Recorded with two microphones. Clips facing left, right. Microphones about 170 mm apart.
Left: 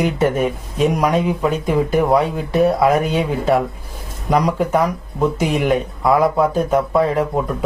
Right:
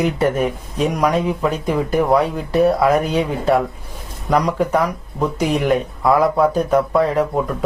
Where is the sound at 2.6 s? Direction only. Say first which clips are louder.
Even; centre (ahead or behind).